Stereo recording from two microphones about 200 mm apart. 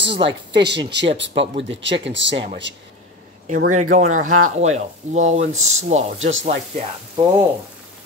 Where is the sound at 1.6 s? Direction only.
65° right (ahead or behind).